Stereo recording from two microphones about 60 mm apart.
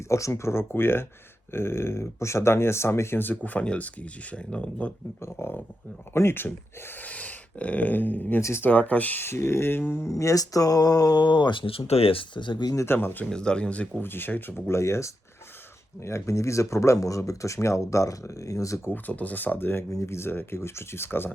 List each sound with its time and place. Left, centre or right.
0.1 s speech: left; by 4.9 s centre
5.2 s speech: left
7.0 s speech: left
8.4 s speech: left
8.6 s speech: left
9.2 s speech: left
10.1 s speech: left
12.9 s speech: left
13.3 s speech: centre
14.0 s speech: left
14.7 s speech: left
18.9 s speech: left
19.9 s speech: left